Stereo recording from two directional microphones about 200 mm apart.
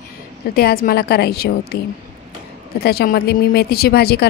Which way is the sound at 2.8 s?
50° left (ahead or behind).